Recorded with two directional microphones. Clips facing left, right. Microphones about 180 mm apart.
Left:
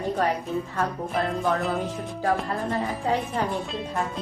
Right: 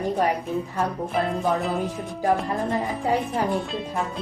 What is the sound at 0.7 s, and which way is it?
Music, centre (ahead or behind).